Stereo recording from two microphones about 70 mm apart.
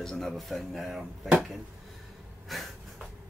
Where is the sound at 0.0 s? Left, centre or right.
Centre.